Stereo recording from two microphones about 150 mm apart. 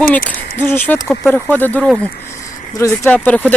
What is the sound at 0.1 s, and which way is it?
Speech, 10° left (ahead or behind).